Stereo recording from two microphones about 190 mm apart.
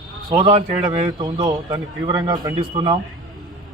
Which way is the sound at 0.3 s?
30° right (ahead or behind).